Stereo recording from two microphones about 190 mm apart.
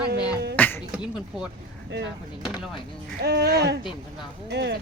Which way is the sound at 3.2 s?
55° right (ahead or behind).